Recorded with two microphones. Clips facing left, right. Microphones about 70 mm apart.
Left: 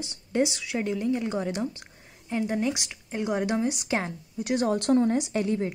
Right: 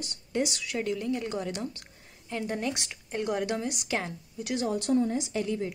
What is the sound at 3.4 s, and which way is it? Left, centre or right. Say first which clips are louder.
Speech: left 4 dB; left.